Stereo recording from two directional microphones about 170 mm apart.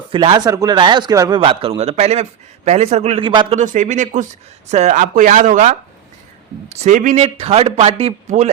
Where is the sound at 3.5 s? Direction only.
45° right (ahead or behind).